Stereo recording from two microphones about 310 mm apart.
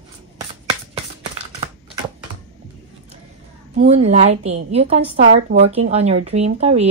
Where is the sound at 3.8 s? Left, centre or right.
Centre.